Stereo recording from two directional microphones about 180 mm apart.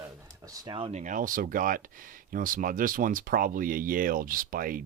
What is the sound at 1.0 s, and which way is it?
Speech, 45° right (ahead or behind).